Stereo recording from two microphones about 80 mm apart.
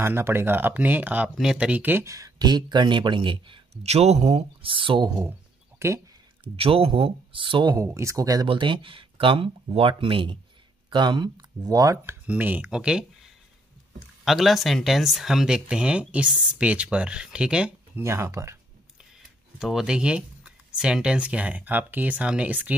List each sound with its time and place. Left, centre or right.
0.0 s speech: right
1.4 s speech: centre
1.8 s speech: right
2.0 s speech: right
4.6 s speech: right
5.8 s speech: right
7.3 s speech: right
7.7 s speech: right
8.5 s speech: right
10.9 s speech: right
12.3 s speech: right
12.6 s speech: centre
17.9 s speech: right
19.6 s speech: centre